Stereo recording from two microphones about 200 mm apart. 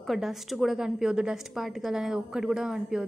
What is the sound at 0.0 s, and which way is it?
A woman's voice, centre (ahead or behind).